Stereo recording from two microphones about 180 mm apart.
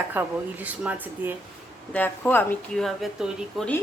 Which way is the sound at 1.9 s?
10° left (ahead or behind).